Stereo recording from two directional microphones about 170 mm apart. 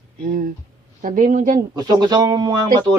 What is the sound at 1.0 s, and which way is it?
Speech, 50° right (ahead or behind).